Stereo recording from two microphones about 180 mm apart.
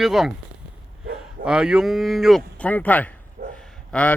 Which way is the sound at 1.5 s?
5° right (ahead or behind).